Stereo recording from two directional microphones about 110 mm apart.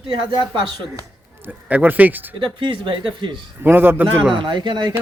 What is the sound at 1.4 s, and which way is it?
Speech, 15° right (ahead or behind).